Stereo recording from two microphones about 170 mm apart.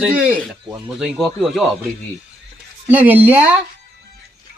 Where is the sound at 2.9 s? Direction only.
10° right (ahead or behind).